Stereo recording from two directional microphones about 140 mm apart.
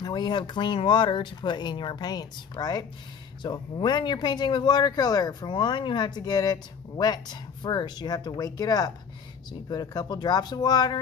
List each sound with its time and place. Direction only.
0.0 s speech: 30° left (ahead or behind)